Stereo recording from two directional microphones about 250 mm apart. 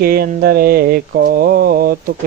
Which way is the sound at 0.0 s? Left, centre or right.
Right.